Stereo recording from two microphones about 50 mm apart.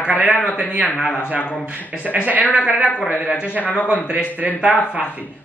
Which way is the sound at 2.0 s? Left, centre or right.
Right.